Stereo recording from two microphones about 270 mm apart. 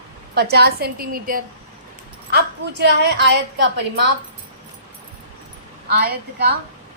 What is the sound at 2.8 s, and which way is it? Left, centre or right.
A woman's voice, right.